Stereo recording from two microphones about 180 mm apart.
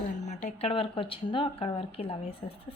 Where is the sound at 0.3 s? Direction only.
40° left (ahead or behind).